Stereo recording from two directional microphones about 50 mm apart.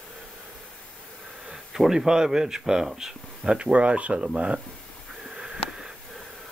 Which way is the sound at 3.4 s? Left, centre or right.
Right.